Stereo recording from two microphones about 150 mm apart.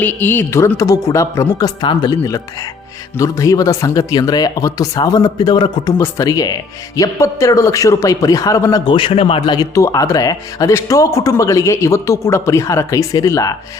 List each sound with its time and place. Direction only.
0.0 s speech: 15° left (ahead or behind)